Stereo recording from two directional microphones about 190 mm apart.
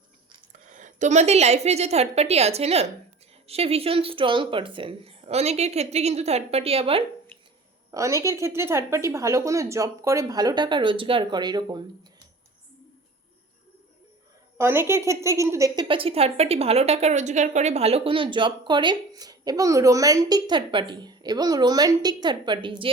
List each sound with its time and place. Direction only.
0.5 s a woman's voice: 40° right (ahead or behind)
7.9 s a woman's voice: 15° right (ahead or behind)
14.6 s speech: 10° right (ahead or behind)